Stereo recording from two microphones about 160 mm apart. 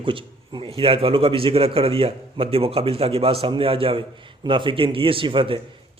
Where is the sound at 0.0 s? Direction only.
30° right (ahead or behind).